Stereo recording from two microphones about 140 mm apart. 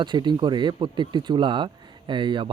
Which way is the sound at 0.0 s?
30° right (ahead or behind).